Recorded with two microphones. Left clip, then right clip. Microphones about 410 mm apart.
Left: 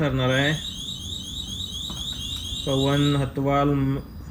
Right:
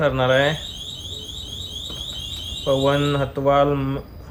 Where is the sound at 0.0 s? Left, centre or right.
Centre.